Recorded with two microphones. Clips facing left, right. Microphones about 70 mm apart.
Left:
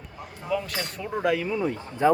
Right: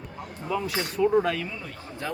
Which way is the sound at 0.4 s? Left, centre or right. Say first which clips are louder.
Even; centre.